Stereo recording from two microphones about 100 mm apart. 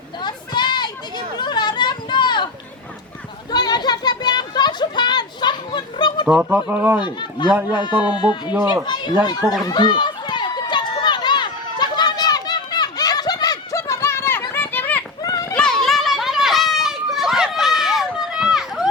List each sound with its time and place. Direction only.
0.2 s a sound: 50° left (ahead or behind)
3.5 s a sound: 45° left (ahead or behind)
6.2 s speech: 5° right (ahead or behind)
6.5 s speech: 20° right (ahead or behind)
7.0 s speech: 50° left (ahead or behind)
9.6 s run: 45° left (ahead or behind); by 14.4 s 25° left (ahead or behind)
14.5 s children playing: 20° left (ahead or behind)
15.2 s a sound: 40° left (ahead or behind)
15.5 s children playing: 5° left (ahead or behind)